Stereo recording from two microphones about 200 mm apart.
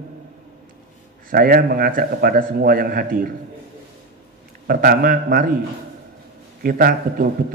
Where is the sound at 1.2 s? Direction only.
45° right (ahead or behind).